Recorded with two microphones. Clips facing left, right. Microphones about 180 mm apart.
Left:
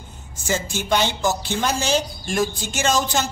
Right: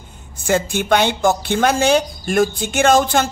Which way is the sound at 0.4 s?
55° right (ahead or behind).